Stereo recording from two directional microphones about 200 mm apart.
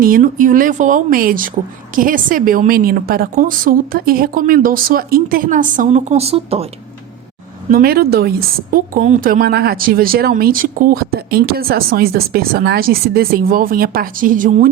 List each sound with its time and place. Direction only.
0.0 s speech: 45° right (ahead or behind)
7.7 s speech: 45° right (ahead or behind)